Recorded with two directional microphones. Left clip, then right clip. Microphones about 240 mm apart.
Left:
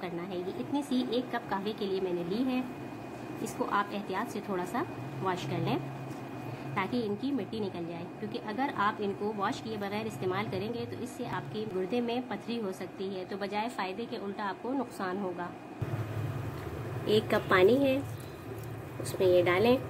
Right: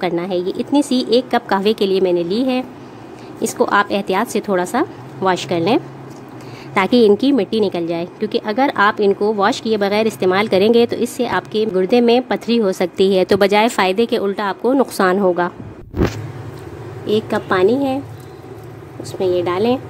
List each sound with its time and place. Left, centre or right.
0.0 s a woman's voice: right
17.0 s a woman's voice: centre
19.1 s a woman's voice: centre